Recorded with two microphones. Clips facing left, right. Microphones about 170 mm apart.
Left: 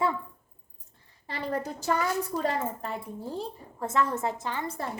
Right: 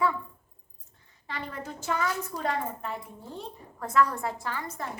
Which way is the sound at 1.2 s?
35° left (ahead or behind).